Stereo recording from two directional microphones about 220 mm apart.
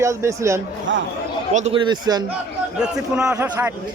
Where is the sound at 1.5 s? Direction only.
25° right (ahead or behind).